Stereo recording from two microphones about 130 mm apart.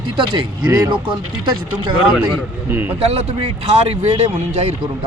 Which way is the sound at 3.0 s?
50° right (ahead or behind).